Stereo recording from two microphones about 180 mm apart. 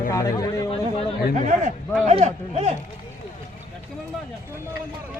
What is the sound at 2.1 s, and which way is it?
Speech, 40° right (ahead or behind).